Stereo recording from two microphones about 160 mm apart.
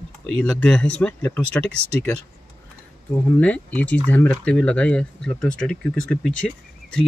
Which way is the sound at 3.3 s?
10° left (ahead or behind).